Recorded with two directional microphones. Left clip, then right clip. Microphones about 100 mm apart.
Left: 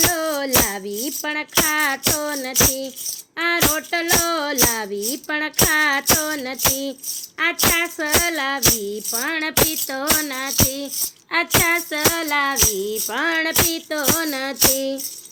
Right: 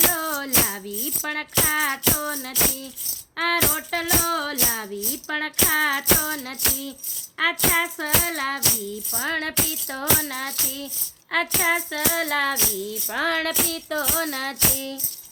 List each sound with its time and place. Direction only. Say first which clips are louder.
0.1 s tambourine: left 4 dB; 30° left (ahead or behind)
3.3 s speech: left 3 dB; 35° left (ahead or behind)